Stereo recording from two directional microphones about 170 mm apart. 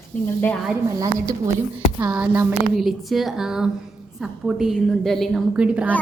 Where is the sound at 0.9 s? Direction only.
20° right (ahead or behind).